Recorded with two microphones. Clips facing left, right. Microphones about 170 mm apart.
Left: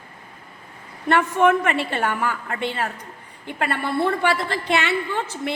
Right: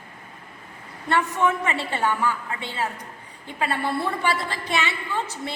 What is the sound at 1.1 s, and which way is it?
A woman's voice, 55° left (ahead or behind).